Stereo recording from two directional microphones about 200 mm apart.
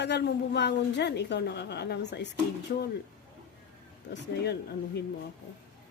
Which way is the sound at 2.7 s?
50° left (ahead or behind).